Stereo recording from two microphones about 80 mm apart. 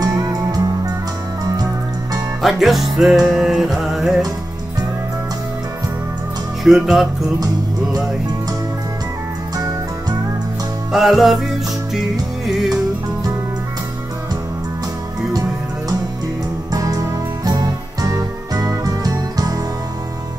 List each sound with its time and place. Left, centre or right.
0.0 s music: right
2.4 s music: centre
6.6 s music: centre
10.9 s music: centre
12.4 s music: centre
16.7 s music: right